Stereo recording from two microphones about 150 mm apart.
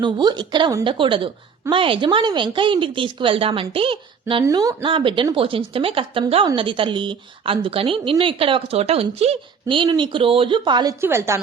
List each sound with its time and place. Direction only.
0.0 s speech: 30° right (ahead or behind)
4.4 s speech: 25° right (ahead or behind)
11.0 s a woman's voice: 15° right (ahead or behind)